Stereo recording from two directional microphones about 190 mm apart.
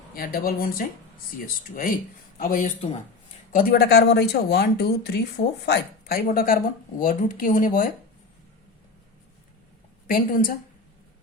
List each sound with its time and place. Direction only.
0.1 s speech: 50° left (ahead or behind)
2.4 s speech: 45° left (ahead or behind)
10.1 s speech: 45° left (ahead or behind)